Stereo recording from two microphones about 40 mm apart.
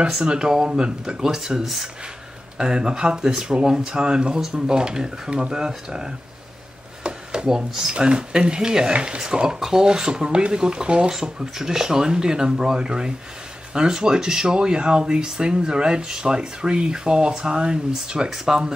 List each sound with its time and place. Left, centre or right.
0.0 s speech: centre
2.5 s speech: centre
7.0 s a sound: right
7.9 s speech: right